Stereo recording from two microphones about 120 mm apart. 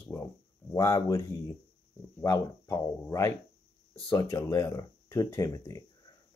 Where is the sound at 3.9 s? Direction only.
40° left (ahead or behind).